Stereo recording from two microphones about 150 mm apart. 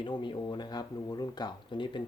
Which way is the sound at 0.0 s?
30° left (ahead or behind).